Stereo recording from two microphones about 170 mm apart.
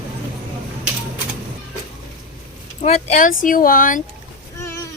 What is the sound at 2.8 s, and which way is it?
A woman's voice, 40° left (ahead or behind).